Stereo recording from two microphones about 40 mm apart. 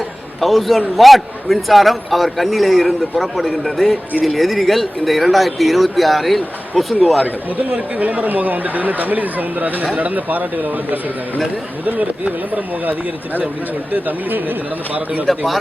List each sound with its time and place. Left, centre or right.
0.3 s a man's voice: centre
7.7 s speech: right
12.5 s speech: right
15.3 s a man's voice: centre